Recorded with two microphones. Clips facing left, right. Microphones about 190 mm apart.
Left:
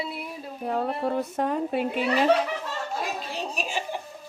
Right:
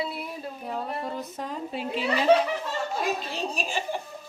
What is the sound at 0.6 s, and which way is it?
Speech, 60° left (ahead or behind).